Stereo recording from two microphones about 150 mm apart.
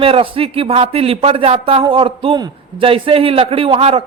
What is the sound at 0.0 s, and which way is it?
A man's voice, 40° right (ahead or behind).